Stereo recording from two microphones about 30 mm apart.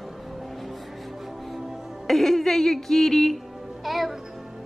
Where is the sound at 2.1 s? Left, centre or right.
Centre.